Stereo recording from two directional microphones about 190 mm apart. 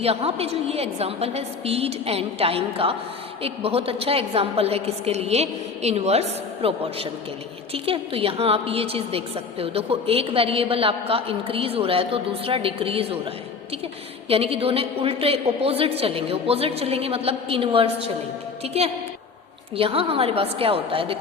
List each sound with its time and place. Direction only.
0.0 s a woman's voice: 30° right (ahead or behind)